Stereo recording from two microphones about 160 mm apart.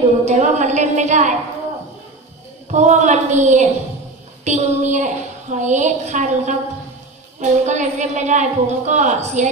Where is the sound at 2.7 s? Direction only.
45° right (ahead or behind).